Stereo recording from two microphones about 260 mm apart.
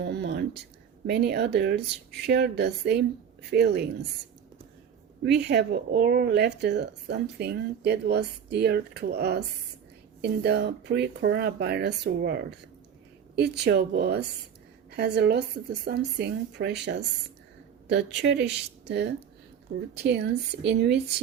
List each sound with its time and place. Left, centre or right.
0.0 s speech: right
5.2 s speech: right